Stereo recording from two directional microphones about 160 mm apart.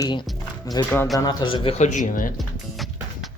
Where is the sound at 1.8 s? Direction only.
50° left (ahead or behind).